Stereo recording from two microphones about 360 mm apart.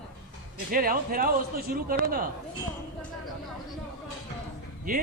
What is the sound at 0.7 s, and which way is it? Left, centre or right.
A man's voice, right.